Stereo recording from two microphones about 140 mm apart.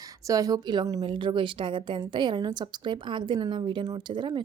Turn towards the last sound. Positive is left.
turn(degrees=-35)  # may be behind; listen again after turning